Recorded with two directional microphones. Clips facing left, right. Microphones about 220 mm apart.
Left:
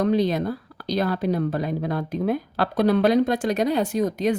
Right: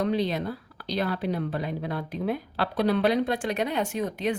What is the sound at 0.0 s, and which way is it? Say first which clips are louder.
Speech: left 5 dB; 45° left (ahead or behind).